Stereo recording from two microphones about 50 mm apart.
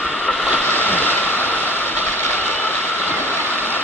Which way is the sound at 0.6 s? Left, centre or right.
Left.